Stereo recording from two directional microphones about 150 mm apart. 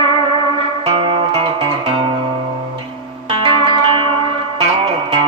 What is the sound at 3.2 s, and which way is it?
Music, 35° right (ahead or behind).